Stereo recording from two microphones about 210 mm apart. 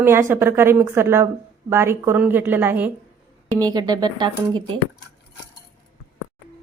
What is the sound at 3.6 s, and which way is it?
Speech, 20° right (ahead or behind).